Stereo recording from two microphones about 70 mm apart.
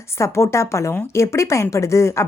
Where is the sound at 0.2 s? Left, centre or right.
Left.